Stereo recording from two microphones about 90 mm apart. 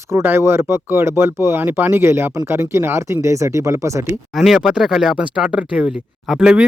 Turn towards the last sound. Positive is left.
turn(degrees=-10)  # may be behind; listen again after turning